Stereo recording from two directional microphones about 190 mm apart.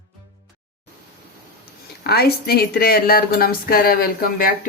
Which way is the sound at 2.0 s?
55° left (ahead or behind).